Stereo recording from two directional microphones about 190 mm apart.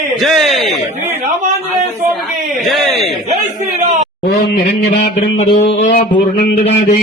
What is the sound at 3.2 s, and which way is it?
Speech, 40° right (ahead or behind).